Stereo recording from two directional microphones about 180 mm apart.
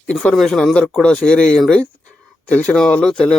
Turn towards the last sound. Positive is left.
turn(degrees=5)  # may be behind; listen again after turning